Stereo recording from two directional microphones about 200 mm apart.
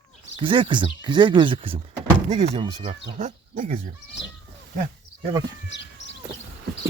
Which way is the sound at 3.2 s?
40° right (ahead or behind).